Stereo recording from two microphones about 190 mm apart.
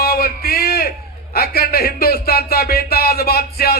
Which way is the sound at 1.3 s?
55° left (ahead or behind).